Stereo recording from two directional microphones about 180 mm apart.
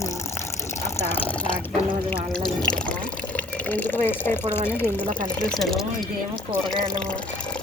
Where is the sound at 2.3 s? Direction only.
5° left (ahead or behind).